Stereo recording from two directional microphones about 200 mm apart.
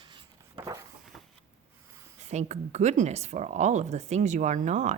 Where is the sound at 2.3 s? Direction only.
35° right (ahead or behind).